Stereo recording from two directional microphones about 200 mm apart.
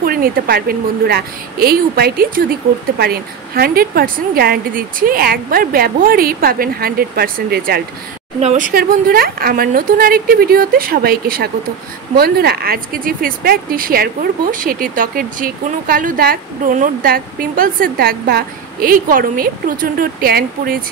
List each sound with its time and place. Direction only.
0.0 s speech: 45° right (ahead or behind)
8.4 s speech: 35° right (ahead or behind)